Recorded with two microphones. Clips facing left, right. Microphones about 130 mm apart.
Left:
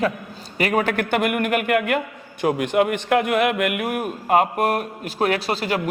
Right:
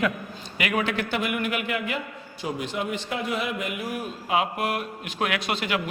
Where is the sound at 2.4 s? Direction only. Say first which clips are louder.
Left 10 dB; 60° left (ahead or behind).